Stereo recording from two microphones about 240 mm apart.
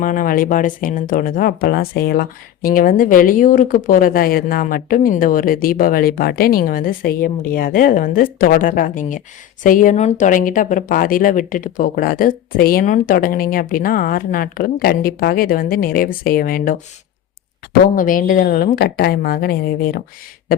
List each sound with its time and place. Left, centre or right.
0.0 s speech: left
17.9 s speech: left